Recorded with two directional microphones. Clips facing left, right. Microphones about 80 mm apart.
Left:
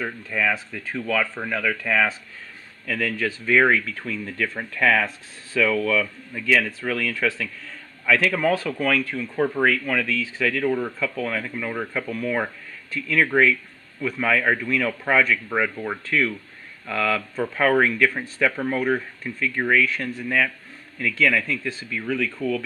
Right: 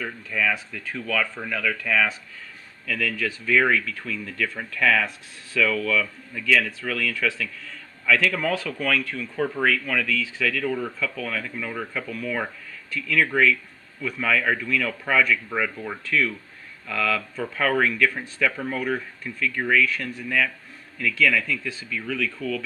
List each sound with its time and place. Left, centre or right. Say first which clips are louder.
0.0 s speech: left 1 dB; left